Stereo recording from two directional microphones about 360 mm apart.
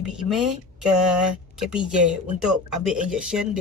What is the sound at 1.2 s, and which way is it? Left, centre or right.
Speech, centre.